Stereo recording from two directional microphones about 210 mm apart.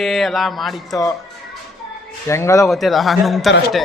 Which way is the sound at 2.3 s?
15° left (ahead or behind).